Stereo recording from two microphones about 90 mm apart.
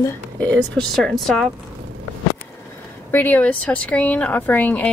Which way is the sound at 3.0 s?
20° left (ahead or behind).